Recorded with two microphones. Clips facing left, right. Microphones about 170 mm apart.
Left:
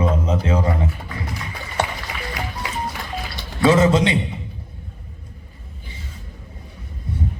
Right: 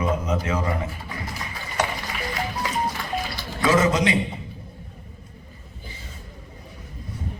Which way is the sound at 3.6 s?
30° left (ahead or behind).